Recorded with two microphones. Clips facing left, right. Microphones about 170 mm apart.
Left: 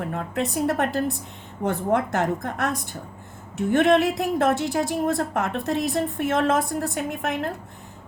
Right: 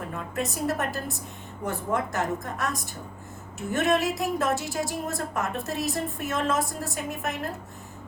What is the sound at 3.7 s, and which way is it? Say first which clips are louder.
A woman's voice: left 6 dB; 55° left (ahead or behind).